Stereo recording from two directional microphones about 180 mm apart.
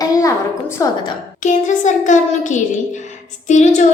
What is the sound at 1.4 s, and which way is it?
A woman's voice, 45° left (ahead or behind).